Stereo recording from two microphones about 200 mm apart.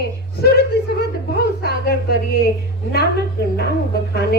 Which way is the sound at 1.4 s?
50° left (ahead or behind).